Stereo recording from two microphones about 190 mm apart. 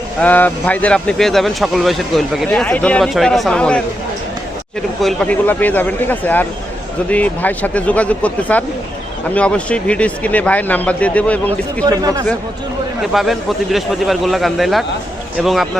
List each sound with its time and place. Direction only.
0.2 s speech: 10° left (ahead or behind)
5.0 s speech: 5° left (ahead or behind)
11.9 s speech: 20° right (ahead or behind)
13.0 s speech: centre (ahead or behind)